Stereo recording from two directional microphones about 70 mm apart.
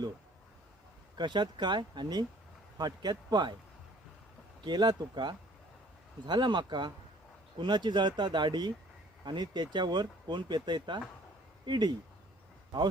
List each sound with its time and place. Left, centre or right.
1.1 s speech: right
2.7 s a man's voice: right
4.6 s speech: right